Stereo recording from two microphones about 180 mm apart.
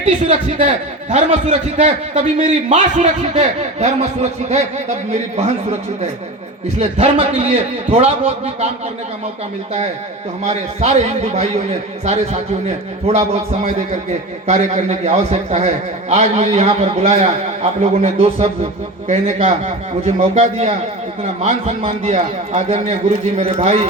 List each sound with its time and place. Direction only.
0.0 s a man's voice: 35° right (ahead or behind)
6.7 s a man's voice: 35° right (ahead or behind)
10.4 s a man's voice: 40° right (ahead or behind)